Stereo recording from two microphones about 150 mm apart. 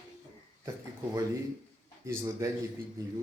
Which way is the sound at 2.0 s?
20° right (ahead or behind).